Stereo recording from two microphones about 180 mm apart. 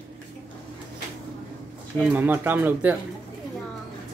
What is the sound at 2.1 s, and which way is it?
Speech, 10° right (ahead or behind).